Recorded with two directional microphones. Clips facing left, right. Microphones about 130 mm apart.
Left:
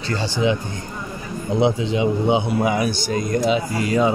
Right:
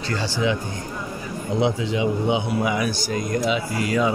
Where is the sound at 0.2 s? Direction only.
25° left (ahead or behind).